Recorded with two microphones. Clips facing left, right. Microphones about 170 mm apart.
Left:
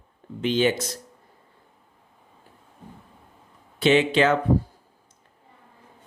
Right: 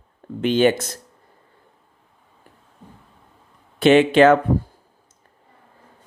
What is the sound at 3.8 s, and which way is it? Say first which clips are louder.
Speech: right 6 dB; 55° right (ahead or behind).